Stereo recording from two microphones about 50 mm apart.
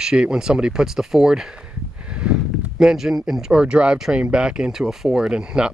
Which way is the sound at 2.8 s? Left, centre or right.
Centre.